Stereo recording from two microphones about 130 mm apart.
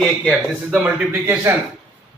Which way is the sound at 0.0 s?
Centre (ahead or behind).